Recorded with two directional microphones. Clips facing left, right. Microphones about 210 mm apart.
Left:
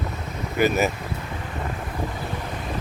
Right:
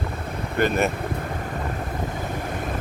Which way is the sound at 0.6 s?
5° left (ahead or behind).